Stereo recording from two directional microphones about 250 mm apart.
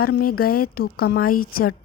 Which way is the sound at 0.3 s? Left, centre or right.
Left.